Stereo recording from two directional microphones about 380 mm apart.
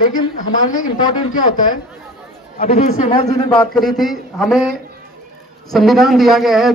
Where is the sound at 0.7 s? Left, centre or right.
Centre.